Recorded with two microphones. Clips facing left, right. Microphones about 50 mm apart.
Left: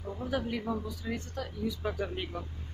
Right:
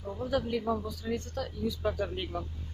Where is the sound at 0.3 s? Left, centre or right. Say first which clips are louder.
Right 3 dB; centre.